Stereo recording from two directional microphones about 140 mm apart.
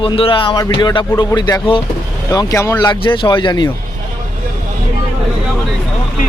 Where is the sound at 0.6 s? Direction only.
30° left (ahead or behind).